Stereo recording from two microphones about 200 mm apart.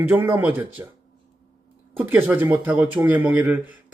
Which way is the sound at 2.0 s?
10° right (ahead or behind).